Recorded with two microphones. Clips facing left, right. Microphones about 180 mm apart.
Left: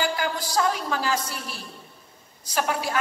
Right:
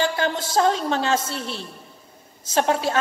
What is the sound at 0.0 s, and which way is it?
A woman's voice, 25° right (ahead or behind).